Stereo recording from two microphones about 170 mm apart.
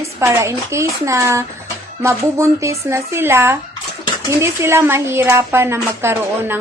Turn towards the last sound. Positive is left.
turn(degrees=-15)  # may be behind; listen again after turning